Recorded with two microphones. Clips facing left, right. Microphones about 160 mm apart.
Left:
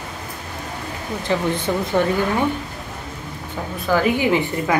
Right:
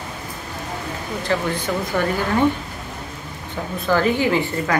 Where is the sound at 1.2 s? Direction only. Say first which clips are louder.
Left 2 dB; 20° left (ahead or behind).